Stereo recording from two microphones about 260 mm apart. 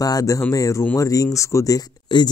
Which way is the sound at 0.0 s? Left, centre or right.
Centre.